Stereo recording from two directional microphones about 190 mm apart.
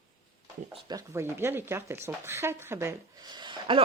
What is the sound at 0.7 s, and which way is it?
Speech, 20° right (ahead or behind).